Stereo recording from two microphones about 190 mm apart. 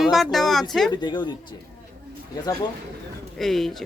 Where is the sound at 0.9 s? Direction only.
25° left (ahead or behind).